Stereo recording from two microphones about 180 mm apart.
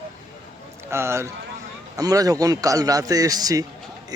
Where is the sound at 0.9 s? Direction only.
15° right (ahead or behind).